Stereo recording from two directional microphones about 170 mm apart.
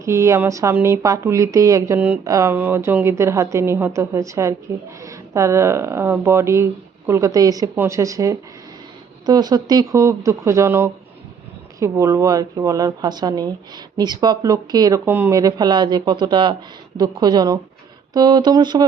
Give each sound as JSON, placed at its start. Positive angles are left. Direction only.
{"t": 0.0, "sound": "a woman's voice", "side_deg": -15}